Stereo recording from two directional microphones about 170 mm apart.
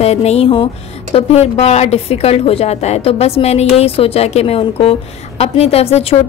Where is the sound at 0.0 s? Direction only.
40° left (ahead or behind).